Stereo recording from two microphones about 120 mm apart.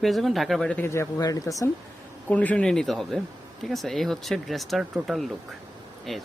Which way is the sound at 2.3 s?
10° left (ahead or behind).